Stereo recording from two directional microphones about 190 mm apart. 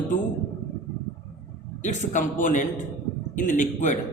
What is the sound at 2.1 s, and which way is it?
A man's voice, 40° left (ahead or behind).